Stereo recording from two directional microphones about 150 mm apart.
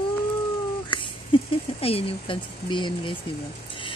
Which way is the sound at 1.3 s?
35° left (ahead or behind).